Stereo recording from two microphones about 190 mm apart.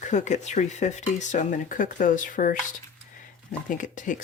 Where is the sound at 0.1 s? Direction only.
40° left (ahead or behind).